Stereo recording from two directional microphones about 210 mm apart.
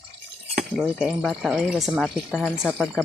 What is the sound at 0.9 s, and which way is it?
Speech, centre (ahead or behind).